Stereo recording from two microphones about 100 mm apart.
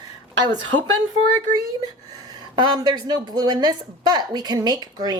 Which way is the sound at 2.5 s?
45° right (ahead or behind).